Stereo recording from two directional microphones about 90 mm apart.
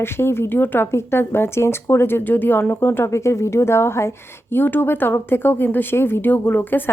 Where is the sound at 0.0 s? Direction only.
25° left (ahead or behind).